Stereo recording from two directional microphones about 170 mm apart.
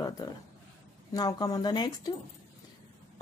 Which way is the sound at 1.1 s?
20° left (ahead or behind).